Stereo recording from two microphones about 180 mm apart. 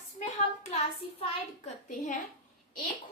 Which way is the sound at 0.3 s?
40° left (ahead or behind).